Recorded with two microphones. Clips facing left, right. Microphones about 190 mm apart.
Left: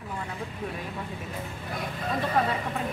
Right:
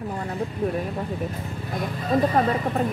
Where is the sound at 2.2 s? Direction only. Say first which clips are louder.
Right 6 dB; 40° right (ahead or behind).